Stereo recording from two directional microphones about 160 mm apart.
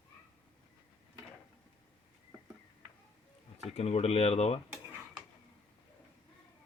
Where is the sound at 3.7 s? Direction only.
40° left (ahead or behind).